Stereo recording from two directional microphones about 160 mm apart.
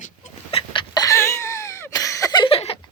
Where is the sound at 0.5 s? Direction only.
30° left (ahead or behind).